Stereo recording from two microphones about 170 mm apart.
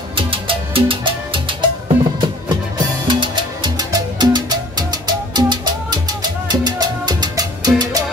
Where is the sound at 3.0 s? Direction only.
25° right (ahead or behind).